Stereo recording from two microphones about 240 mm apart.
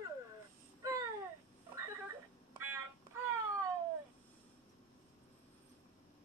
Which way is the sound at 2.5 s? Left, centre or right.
Centre.